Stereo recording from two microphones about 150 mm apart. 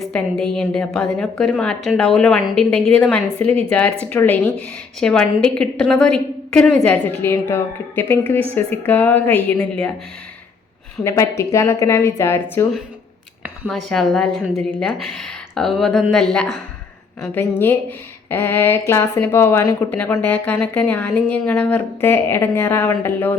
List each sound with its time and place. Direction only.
0.0 s a woman's voice: 5° left (ahead or behind)
11.0 s speech: 20° left (ahead or behind)
13.7 s a woman's voice: centre (ahead or behind)
17.6 s speech: 15° left (ahead or behind)